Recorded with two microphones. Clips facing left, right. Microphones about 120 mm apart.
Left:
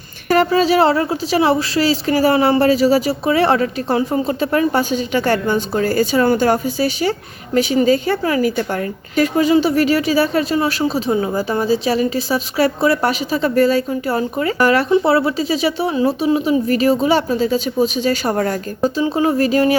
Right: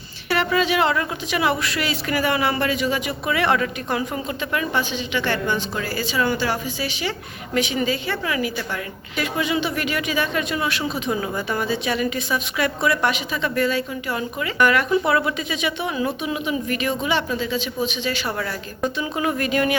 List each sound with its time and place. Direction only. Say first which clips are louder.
0.3 s speech: left 7 dB; 40° left (ahead or behind)